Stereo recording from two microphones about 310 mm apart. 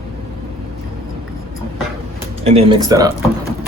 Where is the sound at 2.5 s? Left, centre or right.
Centre.